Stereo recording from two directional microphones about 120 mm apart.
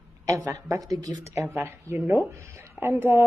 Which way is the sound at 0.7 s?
30° right (ahead or behind).